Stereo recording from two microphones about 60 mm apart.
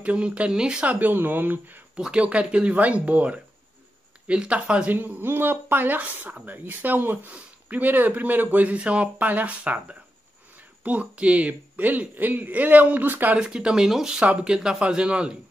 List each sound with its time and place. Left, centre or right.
0.0 s a man's voice: centre
0.8 s speech: right
2.0 s a man's voice: centre
4.9 s a man's voice: right
13.4 s speech: centre